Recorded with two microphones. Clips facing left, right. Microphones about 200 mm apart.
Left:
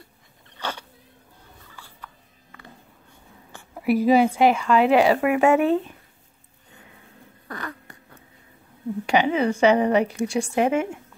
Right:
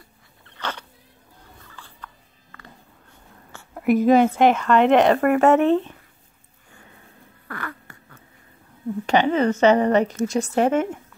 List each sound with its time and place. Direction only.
0.5 s dog: 10° left (ahead or behind)
1.7 s a sound: 10° left (ahead or behind)
2.5 s whispering: 15° left (ahead or behind)
7.4 s fart: 15° left (ahead or behind)
9.0 s a woman's voice: 10° left (ahead or behind)